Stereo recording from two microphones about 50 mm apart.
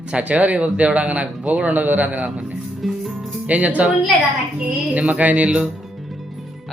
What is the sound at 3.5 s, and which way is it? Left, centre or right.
Speech, right.